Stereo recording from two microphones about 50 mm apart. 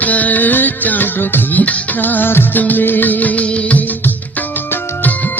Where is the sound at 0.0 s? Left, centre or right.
Left.